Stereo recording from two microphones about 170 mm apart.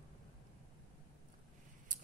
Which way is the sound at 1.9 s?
50° right (ahead or behind).